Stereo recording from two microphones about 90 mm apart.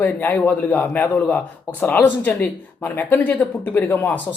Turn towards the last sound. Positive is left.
turn(degrees=20)  # may be behind; listen again after turning